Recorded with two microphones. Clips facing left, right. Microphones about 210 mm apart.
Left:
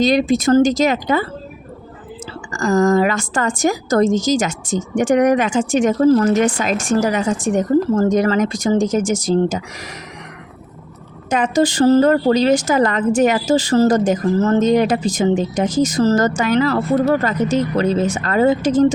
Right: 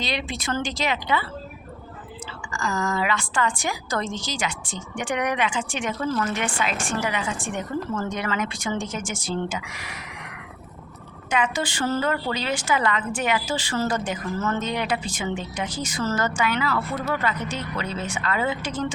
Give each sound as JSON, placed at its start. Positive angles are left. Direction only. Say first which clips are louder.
{"t": 0.0, "sound": "a woman's voice", "louder": "left 15 dB", "side_deg": 45}
{"t": 2.5, "sound": "a woman's voice", "louder": "left 12 dB", "side_deg": 45}
{"t": 11.3, "sound": "a woman's voice", "louder": "left 9 dB", "side_deg": 40}